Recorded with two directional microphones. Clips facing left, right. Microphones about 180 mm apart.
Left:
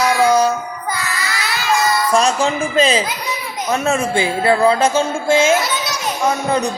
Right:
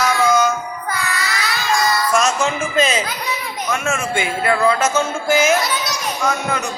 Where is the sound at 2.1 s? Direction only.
30° left (ahead or behind).